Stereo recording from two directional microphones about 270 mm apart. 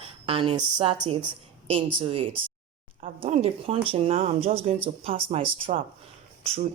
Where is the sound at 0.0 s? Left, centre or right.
Centre.